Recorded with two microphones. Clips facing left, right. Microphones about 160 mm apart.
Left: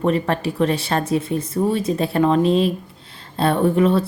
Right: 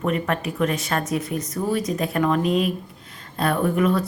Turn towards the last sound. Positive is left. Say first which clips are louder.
# left 4 dB
turn(degrees=30)  # may be behind; listen again after turning